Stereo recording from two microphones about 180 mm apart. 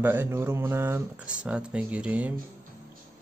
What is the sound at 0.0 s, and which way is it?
Speech, 10° right (ahead or behind).